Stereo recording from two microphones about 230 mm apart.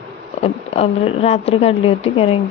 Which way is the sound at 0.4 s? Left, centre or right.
Left.